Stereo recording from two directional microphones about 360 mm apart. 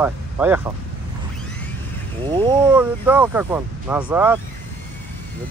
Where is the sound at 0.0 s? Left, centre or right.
Centre.